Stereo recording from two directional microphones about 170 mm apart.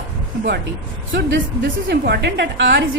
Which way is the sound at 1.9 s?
85° right.